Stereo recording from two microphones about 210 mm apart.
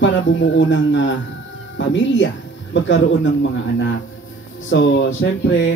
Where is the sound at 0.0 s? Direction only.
60° left (ahead or behind).